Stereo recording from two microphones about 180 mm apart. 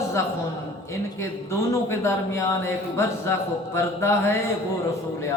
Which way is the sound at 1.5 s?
15° left (ahead or behind).